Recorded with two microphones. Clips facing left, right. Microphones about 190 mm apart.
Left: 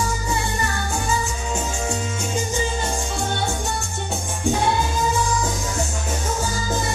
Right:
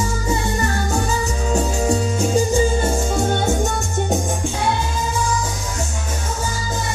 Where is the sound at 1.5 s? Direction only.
35° right (ahead or behind).